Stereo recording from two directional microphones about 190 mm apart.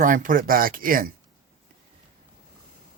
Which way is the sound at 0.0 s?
45° right (ahead or behind).